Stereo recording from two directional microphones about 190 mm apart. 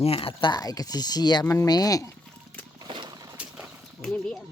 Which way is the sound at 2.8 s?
25° right (ahead or behind).